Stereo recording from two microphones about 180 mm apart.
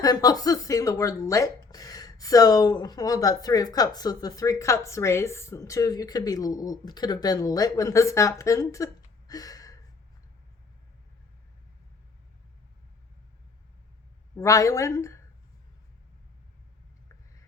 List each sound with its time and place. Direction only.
0.0 s speech: 20° left (ahead or behind)
9.2 s a sound: 20° left (ahead or behind)
14.3 s a woman's voice: 20° left (ahead or behind)